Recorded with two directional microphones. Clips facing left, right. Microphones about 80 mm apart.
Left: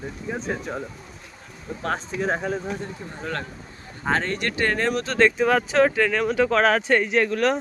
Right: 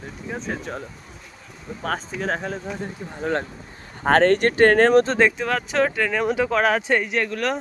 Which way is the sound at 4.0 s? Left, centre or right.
Right.